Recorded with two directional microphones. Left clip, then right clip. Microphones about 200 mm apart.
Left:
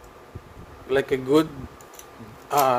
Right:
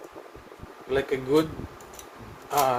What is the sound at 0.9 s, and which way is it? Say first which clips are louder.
Speech: left 4 dB; 55° left (ahead or behind).